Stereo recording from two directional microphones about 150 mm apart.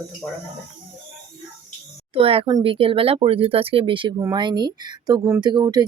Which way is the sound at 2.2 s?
40° right (ahead or behind).